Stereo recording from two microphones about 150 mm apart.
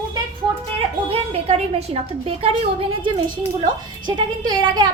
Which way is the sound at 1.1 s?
40° right (ahead or behind).